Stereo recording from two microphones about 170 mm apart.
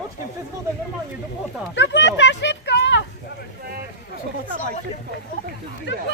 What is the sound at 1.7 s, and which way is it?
Speech, 90° left.